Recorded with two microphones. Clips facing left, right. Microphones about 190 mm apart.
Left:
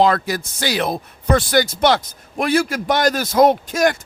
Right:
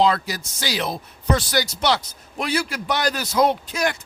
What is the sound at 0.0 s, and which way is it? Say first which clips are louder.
A man's voice: left 3 dB; 50° left (ahead or behind).